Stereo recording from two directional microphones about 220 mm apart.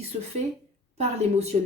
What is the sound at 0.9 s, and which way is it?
Speech, 30° right (ahead or behind).